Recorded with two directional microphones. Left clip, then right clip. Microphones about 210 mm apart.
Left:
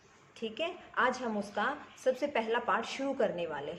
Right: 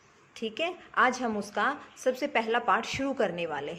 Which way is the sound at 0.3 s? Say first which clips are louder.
Right 4 dB; 45° right (ahead or behind).